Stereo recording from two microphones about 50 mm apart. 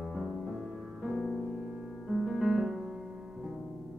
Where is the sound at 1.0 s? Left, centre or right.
Centre.